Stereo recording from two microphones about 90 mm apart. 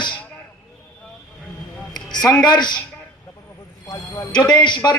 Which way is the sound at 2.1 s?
45° left (ahead or behind).